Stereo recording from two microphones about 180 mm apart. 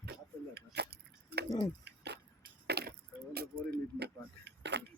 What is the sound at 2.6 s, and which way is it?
Chop, 60° right (ahead or behind).